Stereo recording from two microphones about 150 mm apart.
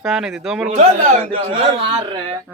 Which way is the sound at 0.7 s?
40° right (ahead or behind).